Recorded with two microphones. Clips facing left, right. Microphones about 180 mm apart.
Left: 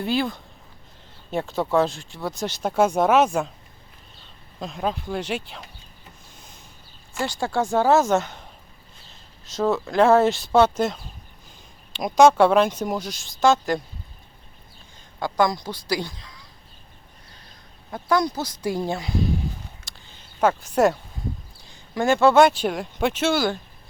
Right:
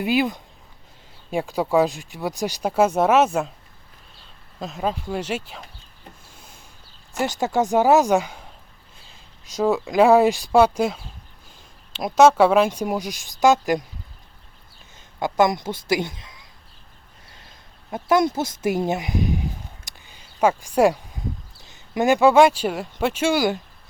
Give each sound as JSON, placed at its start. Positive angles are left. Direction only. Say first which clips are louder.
{"t": 0.0, "sound": "speech", "louder": "right 3 dB", "side_deg": -15}
{"t": 2.6, "sound": "speech", "louder": "right 1 dB", "side_deg": -5}
{"t": 4.6, "sound": "speech", "louder": "right 1 dB", "side_deg": 0}
{"t": 7.3, "sound": "speech", "louder": "right 2 dB", "side_deg": -20}
{"t": 9.6, "sound": "speech", "louder": "right 2 dB", "side_deg": -15}
{"t": 15.2, "sound": "speech", "louder": "right 3 dB", "side_deg": -20}
{"t": 17.9, "sound": "speech", "louder": "right 3 dB", "side_deg": -25}